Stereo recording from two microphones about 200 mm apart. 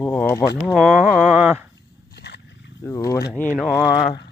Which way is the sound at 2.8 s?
15° left (ahead or behind).